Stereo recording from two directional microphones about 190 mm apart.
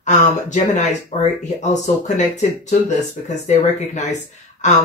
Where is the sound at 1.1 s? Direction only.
30° left (ahead or behind).